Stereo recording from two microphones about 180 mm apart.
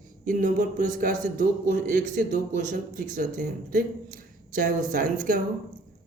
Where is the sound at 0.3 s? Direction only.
50° right (ahead or behind).